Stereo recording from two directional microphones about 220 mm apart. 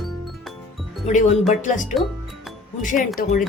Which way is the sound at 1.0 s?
30° left (ahead or behind).